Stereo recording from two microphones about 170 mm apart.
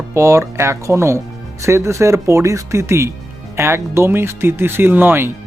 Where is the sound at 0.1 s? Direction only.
15° right (ahead or behind).